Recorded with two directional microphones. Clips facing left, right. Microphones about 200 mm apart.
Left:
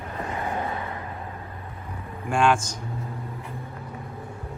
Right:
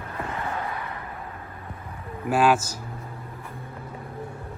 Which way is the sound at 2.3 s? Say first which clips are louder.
Right 1 dB; 5° right (ahead or behind).